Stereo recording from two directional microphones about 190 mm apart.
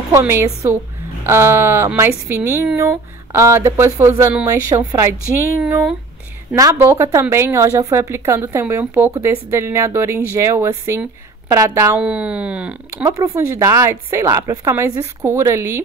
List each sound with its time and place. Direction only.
0.1 s a woman's voice: 15° right (ahead or behind)
13.1 s a woman's voice: 15° right (ahead or behind)